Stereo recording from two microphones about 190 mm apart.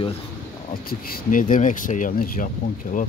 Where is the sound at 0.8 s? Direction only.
45° left (ahead or behind).